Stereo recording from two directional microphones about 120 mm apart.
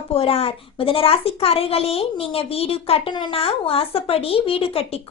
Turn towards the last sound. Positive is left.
turn(degrees=55)  # may be behind; listen again after turning